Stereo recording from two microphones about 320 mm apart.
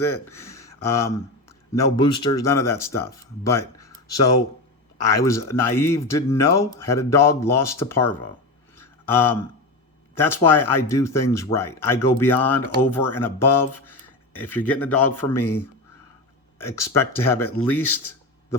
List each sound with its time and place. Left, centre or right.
0.0 s speech: centre
8.8 s a sound: centre
10.2 s speech: centre
13.8 s a sound: centre
14.5 s a man's voice: centre
14.9 s a man's voice: left
16.6 s speech: centre
17.6 s a man's voice: left